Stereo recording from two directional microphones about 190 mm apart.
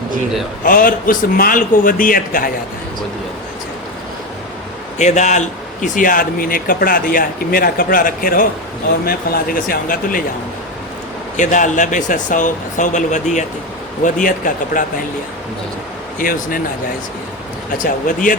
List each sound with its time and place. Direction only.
0.6 s a man's voice: 45° left (ahead or behind)
4.9 s a man's voice: 40° left (ahead or behind)
11.3 s a man's voice: 40° left (ahead or behind)
16.1 s a man's voice: 50° left (ahead or behind)
17.8 s a man's voice: 45° left (ahead or behind)